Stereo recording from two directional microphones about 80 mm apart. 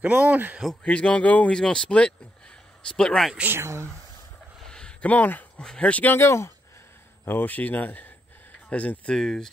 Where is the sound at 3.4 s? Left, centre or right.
Right.